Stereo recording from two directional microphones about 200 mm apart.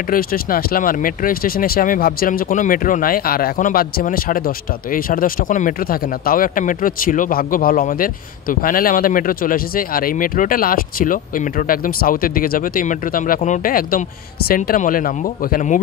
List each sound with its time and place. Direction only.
0.1 s speech: 45° left (ahead or behind)